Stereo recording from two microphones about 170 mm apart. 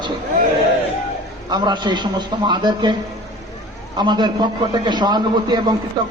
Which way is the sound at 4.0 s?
25° right (ahead or behind).